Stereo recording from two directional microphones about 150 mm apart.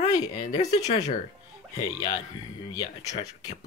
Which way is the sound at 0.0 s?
25° left (ahead or behind).